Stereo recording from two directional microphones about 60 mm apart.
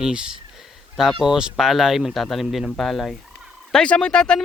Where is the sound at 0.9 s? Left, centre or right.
Centre.